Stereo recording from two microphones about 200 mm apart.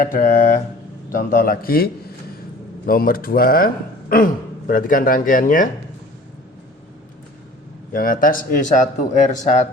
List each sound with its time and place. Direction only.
0.0 s speech: 45° left (ahead or behind)
7.9 s speech: 45° left (ahead or behind)